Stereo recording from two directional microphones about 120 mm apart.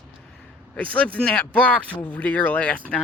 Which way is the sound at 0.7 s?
10° left (ahead or behind).